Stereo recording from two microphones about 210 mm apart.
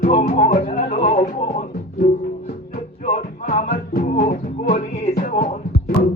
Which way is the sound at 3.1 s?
30° left (ahead or behind).